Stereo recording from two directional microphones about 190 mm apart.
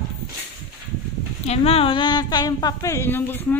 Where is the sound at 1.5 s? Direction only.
30° left (ahead or behind).